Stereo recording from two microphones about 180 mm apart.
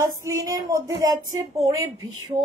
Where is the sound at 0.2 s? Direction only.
20° right (ahead or behind).